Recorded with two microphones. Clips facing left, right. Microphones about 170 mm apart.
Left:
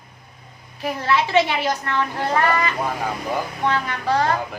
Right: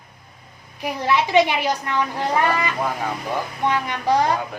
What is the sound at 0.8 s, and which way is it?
Speech, 15° right (ahead or behind).